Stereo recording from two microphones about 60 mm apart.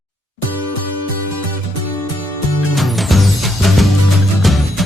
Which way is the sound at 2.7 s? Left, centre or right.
Centre.